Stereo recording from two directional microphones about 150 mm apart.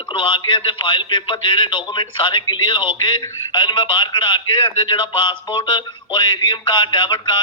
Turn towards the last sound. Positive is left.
turn(degrees=30)  # may be behind; listen again after turning